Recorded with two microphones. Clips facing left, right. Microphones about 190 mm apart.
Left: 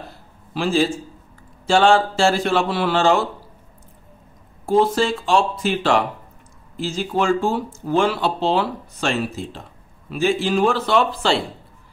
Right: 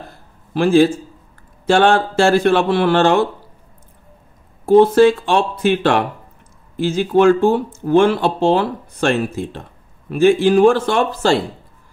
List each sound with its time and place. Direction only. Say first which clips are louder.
0.1 s a sound: right 6 dB; 55° right (ahead or behind)
1.7 s speech: right 2 dB; 55° right (ahead or behind)
4.6 s speech: right 8 dB; 60° right (ahead or behind); by 11.4 s 45° right (ahead or behind)